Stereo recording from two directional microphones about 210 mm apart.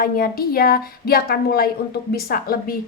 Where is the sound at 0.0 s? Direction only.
45° left (ahead or behind).